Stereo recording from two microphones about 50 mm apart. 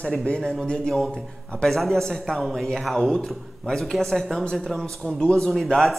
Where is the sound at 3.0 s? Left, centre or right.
Centre.